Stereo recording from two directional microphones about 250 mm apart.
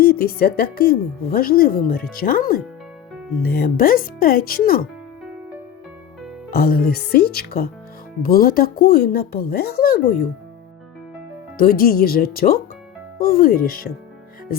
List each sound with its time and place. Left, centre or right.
0.0 s a woman's voice: left
6.5 s a woman's voice: left
11.5 s a woman's voice: left